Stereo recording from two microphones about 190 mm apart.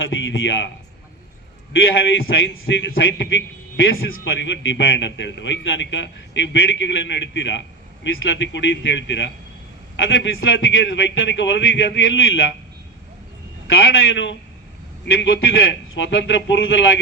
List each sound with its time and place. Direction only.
0.0 s a man's voice: 80° left
2.2 s a man's voice: 75° left (ahead or behind)
13.7 s a man's voice: 70° left (ahead or behind)